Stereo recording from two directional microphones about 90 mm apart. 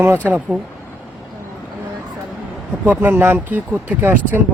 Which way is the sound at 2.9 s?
20° right (ahead or behind).